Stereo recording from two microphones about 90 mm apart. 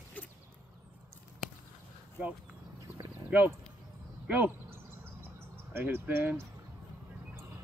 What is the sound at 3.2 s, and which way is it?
Speech, 20° right (ahead or behind).